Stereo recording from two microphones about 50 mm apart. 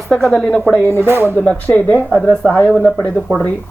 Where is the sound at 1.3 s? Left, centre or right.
Left.